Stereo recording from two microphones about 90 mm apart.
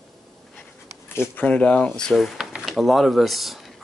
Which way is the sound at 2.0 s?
Centre (ahead or behind).